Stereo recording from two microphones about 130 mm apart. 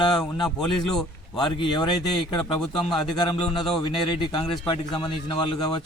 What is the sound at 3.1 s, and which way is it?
A man's voice, 35° left (ahead or behind).